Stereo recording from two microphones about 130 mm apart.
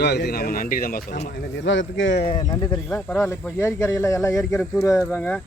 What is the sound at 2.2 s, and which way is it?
Speech, 35° left (ahead or behind).